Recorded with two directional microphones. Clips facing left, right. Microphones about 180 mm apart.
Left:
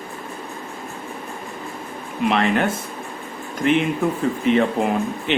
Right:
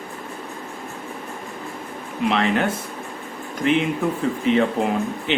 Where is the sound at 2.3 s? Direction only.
55° left (ahead or behind).